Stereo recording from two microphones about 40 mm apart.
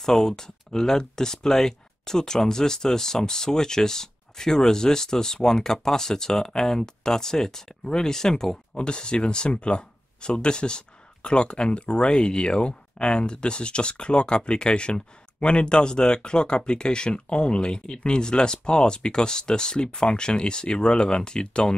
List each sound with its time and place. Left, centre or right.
0.0 s speech: centre